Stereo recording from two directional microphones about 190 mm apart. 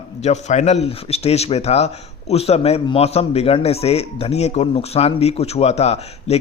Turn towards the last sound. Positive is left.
turn(degrees=35)  # may be behind; listen again after turning